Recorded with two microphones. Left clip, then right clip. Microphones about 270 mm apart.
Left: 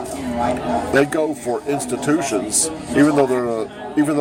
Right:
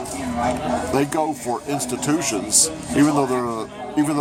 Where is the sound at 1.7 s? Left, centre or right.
Centre.